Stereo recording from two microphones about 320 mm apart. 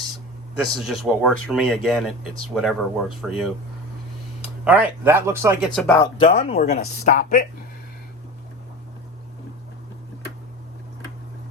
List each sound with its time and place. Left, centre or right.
0.5 s speech: centre
4.6 s speech: centre
5.8 s speech: centre